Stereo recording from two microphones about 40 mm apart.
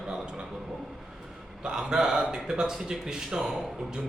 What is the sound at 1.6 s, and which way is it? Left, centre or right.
A man's voice, centre.